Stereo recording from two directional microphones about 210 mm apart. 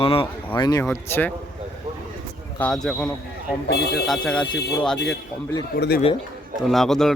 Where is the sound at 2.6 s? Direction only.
Centre (ahead or behind).